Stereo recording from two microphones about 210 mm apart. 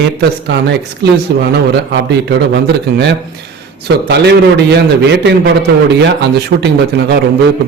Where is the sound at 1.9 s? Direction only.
55° right (ahead or behind).